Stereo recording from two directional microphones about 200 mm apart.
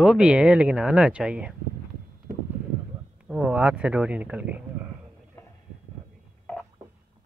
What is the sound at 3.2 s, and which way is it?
Speech, 5° right (ahead or behind).